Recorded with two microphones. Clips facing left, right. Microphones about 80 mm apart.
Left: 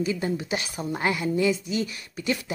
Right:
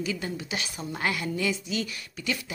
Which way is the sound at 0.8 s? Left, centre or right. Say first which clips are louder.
Left 3 dB; centre.